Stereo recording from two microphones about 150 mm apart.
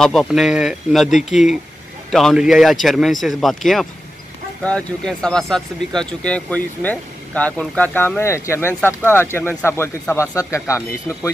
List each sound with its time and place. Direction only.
0.0 s speech: 5° left (ahead or behind); by 10.8 s 20° left (ahead or behind)